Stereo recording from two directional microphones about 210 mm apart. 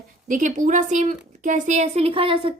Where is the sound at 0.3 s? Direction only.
35° right (ahead or behind).